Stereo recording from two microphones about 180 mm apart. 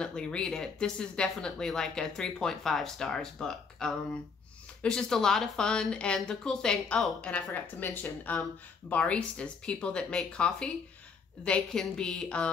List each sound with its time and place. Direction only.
0.0 s speech: 5° left (ahead or behind)